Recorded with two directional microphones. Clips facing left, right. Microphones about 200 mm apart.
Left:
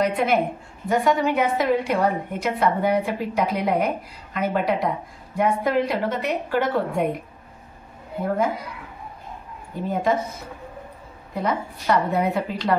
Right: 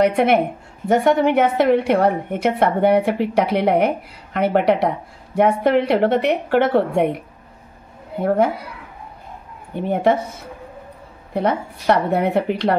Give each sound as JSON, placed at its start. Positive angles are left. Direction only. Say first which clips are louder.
{"t": 0.0, "sound": "a woman's voice", "louder": "right 5 dB", "side_deg": -70}
{"t": 9.8, "sound": "a woman's voice", "louder": "right 5 dB", "side_deg": -65}
{"t": 11.3, "sound": "a woman's voice", "louder": "right 5 dB", "side_deg": -65}